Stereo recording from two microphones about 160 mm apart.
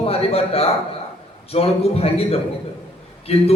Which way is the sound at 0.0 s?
40° left (ahead or behind).